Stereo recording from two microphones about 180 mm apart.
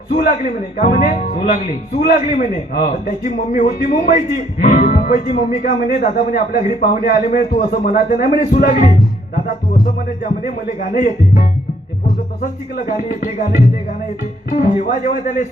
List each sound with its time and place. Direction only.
0.1 s a man's voice: 50° left (ahead or behind)
14.5 s a man's voice: 45° left (ahead or behind)